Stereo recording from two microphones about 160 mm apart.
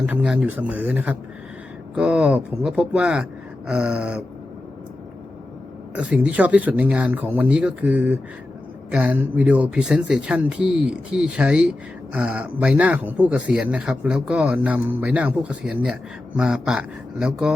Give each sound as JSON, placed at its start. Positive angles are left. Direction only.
{"t": 0.0, "sound": "speech", "side_deg": -5}
{"t": 5.9, "sound": "speech", "side_deg": -10}